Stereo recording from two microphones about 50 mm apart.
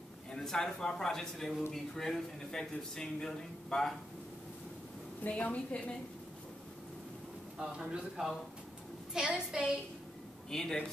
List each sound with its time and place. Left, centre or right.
0.4 s a man's voice: centre
5.2 s a woman's voice: left
7.5 s a woman's voice: centre
9.1 s a woman's voice: centre
10.5 s a man's voice: centre